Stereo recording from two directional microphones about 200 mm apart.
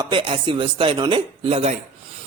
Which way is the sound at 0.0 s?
25° right (ahead or behind).